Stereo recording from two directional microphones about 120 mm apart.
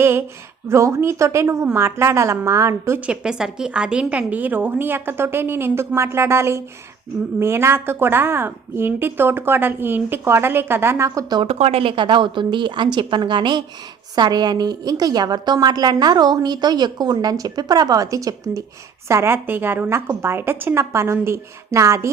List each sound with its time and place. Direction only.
0.0 s a woman's voice: 20° right (ahead or behind)
3.1 s a woman's voice: 5° right (ahead or behind); by 11.3 s 25° right (ahead or behind)
11.4 s a woman's voice: 60° right (ahead or behind); by 22.1 s 25° right (ahead or behind)